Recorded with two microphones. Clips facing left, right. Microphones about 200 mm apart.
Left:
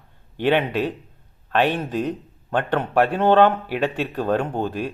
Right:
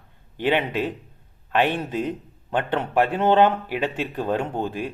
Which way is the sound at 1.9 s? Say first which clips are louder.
Left 2 dB; 15° right (ahead or behind).